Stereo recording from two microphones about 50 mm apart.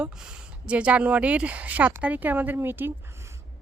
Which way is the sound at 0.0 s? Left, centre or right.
Centre.